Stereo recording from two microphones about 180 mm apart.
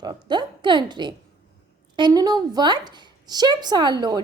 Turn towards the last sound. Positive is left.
turn(degrees=-25)  # may be behind; listen again after turning